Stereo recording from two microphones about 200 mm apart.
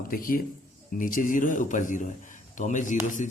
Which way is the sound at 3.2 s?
35° left (ahead or behind).